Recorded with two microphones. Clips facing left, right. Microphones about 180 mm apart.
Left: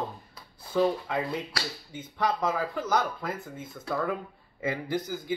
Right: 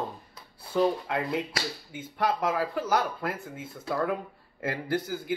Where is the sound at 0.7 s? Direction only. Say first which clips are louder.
Even; 5° right (ahead or behind).